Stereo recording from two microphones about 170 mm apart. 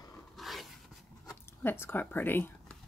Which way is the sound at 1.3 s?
15° left (ahead or behind).